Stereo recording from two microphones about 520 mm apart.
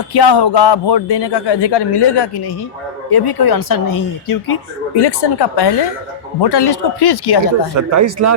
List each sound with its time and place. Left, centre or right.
0.1 s a man's voice: left
4.9 s a man's voice: left
7.8 s speech: right